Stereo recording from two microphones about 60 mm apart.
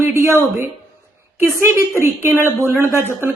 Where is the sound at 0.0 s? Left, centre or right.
Right.